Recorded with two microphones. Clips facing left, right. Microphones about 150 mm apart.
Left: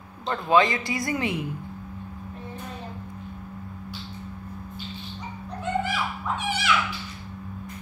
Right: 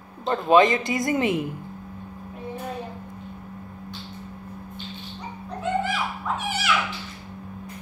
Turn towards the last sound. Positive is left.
turn(degrees=-5)  # may be behind; listen again after turning